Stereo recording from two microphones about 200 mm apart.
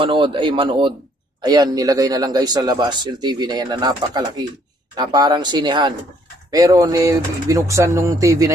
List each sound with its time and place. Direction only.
0.0 s a man's voice: 25° right (ahead or behind)